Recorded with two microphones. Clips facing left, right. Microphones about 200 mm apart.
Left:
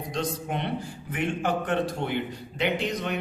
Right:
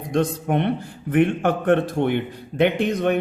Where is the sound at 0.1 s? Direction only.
55° right (ahead or behind).